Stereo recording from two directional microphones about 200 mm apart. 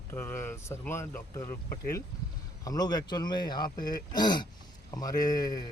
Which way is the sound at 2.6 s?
20° left (ahead or behind).